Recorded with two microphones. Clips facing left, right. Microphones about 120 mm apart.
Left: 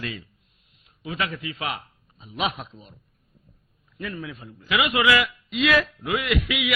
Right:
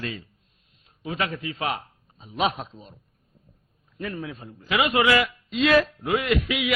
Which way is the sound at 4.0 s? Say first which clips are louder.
Right 1 dB; 35° right (ahead or behind).